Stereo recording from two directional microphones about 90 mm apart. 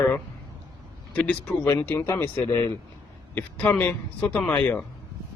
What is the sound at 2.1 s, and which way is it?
Speech, 25° left (ahead or behind).